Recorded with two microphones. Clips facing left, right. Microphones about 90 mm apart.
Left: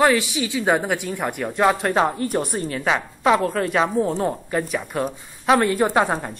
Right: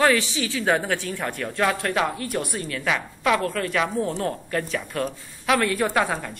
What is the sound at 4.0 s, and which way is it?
Speech, 15° left (ahead or behind).